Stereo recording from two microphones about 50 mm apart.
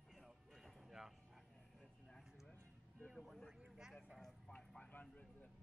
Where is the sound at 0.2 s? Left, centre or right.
Centre.